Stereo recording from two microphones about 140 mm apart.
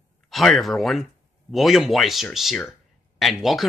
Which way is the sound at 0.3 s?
Centre (ahead or behind).